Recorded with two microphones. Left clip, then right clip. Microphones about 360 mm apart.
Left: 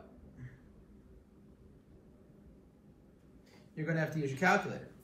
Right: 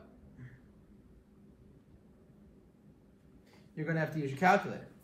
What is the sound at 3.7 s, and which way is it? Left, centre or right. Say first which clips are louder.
Speech: right 1 dB; centre.